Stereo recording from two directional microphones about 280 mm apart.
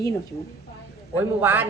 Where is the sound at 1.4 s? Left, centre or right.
Centre.